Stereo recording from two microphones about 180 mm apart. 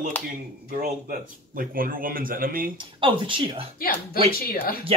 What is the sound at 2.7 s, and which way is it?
Speech, 30° right (ahead or behind).